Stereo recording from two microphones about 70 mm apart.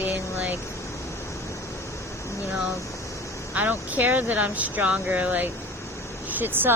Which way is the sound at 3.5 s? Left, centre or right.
Right.